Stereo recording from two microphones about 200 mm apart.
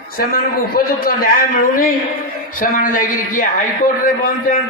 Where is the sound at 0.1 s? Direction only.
45° left (ahead or behind).